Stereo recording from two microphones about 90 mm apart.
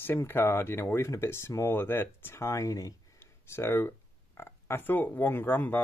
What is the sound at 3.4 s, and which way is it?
Speech, 30° left (ahead or behind).